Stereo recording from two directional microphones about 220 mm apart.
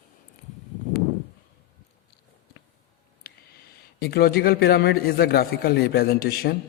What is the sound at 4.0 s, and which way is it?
A man's voice, 45° left (ahead or behind).